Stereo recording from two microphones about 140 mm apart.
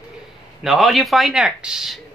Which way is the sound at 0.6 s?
Centre (ahead or behind).